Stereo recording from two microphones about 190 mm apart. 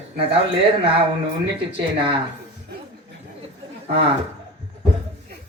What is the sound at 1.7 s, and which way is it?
Speech, 25° right (ahead or behind).